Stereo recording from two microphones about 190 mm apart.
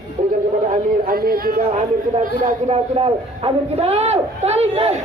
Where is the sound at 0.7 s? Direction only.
50° right (ahead or behind); by 4.9 s 35° right (ahead or behind).